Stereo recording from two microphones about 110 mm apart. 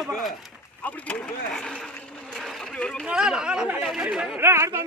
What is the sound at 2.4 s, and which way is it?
Boat, 5° left (ahead or behind).